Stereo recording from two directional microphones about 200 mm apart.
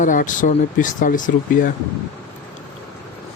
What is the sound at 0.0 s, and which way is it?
Speech, 40° left (ahead or behind).